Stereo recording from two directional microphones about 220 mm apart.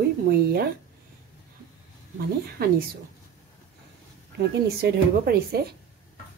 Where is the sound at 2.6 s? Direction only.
45° right (ahead or behind).